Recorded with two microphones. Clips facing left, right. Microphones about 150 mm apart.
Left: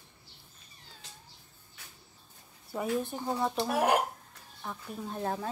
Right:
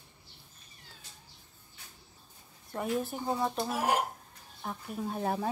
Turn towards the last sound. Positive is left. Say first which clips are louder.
# right 2 dB
turn(degrees=-10)  # may be behind; listen again after turning